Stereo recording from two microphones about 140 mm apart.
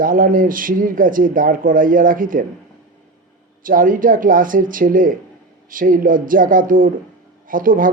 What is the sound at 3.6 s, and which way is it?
Speech, 80° right.